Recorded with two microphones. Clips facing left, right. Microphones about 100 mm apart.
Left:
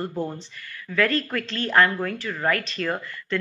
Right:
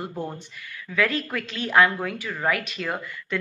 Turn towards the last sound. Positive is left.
turn(degrees=-10)  # may be behind; listen again after turning